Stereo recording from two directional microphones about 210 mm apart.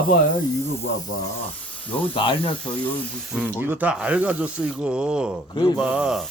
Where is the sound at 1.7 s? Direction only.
5° left (ahead or behind).